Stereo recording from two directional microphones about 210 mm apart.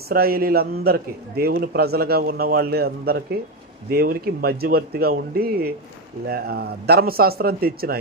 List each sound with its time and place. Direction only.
0.1 s a man's voice: 45° right (ahead or behind)